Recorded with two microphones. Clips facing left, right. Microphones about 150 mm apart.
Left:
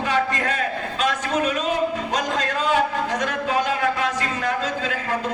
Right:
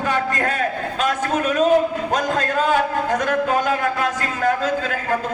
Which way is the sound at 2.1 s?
50° right (ahead or behind).